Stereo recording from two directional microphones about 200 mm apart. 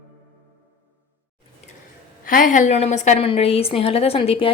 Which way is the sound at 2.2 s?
45° left (ahead or behind).